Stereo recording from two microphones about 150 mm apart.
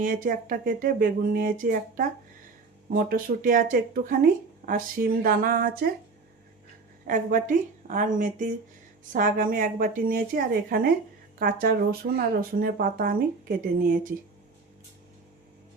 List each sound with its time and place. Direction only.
0.0 s speech: 65° right (ahead or behind); by 5.9 s 80° right
7.1 s a woman's voice: 65° right (ahead or behind)